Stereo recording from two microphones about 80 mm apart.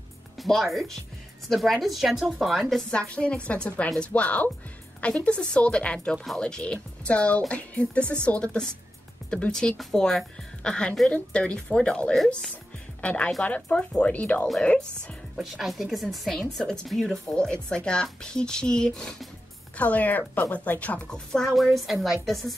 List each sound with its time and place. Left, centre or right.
0.4 s speech: centre
2.9 s speech: centre
6.1 s speech: centre
13.0 s speech: centre
15.3 s speech: centre
19.8 s speech: centre
21.5 s speech: centre